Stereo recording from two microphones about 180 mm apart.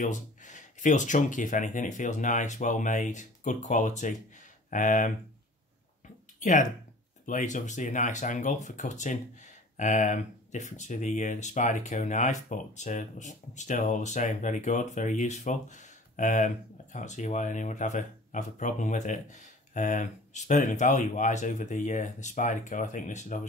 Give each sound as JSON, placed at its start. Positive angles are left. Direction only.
{"t": 0.0, "sound": "speech", "side_deg": 45}
{"t": 6.4, "sound": "speech", "side_deg": 45}